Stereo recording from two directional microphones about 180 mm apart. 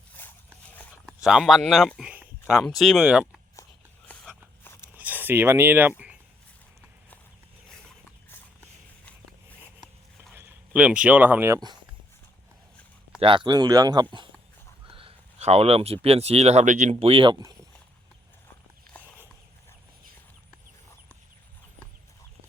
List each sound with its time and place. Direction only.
0.2 s a sound: 10° left (ahead or behind)
1.0 s speech: 5° right (ahead or behind)
4.1 s a sound: 5° left (ahead or behind)
4.9 s speech: 10° right (ahead or behind)
10.3 s speech: 10° right (ahead or behind)
13.1 s speech: 30° right (ahead or behind)